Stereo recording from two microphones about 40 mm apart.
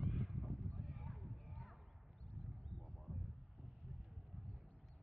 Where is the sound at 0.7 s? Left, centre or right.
Right.